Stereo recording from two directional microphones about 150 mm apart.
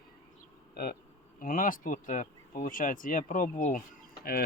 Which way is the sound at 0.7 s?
90° left.